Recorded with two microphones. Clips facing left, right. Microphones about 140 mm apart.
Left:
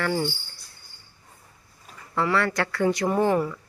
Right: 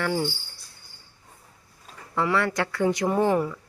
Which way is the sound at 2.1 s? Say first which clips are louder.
Even; 15° right (ahead or behind).